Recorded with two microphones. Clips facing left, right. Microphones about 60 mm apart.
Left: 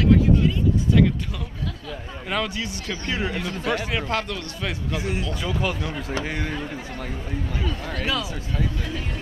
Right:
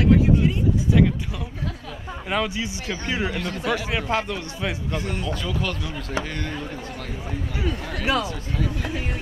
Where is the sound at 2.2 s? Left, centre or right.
Centre.